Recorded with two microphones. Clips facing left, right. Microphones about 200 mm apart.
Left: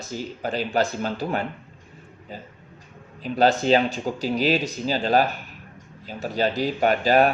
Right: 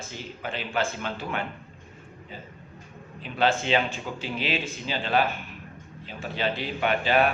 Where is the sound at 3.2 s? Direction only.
40° left (ahead or behind).